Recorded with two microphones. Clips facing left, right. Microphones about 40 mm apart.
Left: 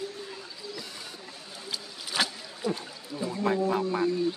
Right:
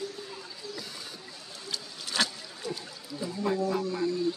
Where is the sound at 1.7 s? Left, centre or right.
Centre.